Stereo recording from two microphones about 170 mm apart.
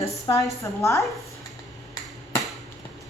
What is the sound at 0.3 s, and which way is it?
Speech, 20° left (ahead or behind).